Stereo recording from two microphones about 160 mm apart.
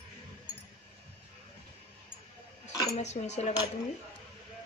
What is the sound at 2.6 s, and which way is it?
Speech, 45° left (ahead or behind).